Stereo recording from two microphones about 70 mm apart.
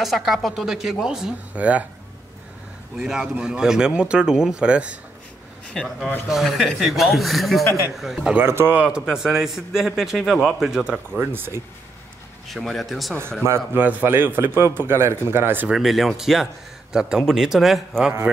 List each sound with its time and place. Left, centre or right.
0.0 s a man's voice: centre
1.5 s speech: centre
3.0 s speech: centre
5.7 s a man's voice: centre
8.5 s a man's voice: right
8.7 s a man's voice: centre
11.1 s speech: right
12.4 s a man's voice: centre
13.7 s a man's voice: right
15.7 s a man's voice: centre